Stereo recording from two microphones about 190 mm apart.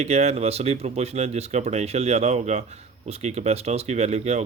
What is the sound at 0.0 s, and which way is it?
Speech, 35° right (ahead or behind).